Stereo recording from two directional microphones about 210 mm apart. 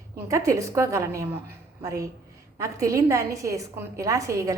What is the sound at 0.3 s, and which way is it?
A woman's voice, 15° right (ahead or behind).